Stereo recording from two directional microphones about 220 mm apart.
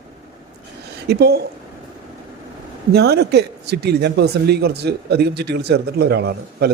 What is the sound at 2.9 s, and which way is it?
Speech, 45° right (ahead or behind).